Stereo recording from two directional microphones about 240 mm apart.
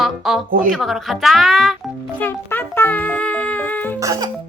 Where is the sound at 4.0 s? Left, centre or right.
Centre.